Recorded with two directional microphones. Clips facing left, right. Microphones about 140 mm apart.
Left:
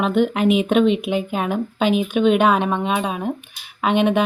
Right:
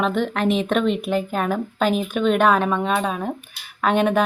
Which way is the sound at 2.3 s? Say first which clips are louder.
Even; centre (ahead or behind).